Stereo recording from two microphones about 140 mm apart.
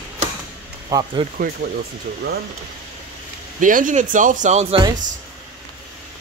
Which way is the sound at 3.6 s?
70° right (ahead or behind).